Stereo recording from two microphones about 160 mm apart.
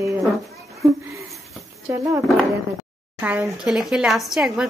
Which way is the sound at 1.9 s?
15° right (ahead or behind).